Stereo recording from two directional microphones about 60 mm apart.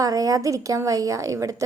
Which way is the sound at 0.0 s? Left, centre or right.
Right.